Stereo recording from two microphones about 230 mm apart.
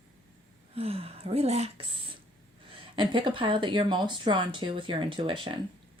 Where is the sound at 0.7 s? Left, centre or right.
Right.